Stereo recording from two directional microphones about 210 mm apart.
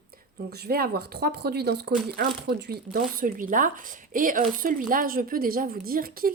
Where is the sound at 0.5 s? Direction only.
45° right (ahead or behind).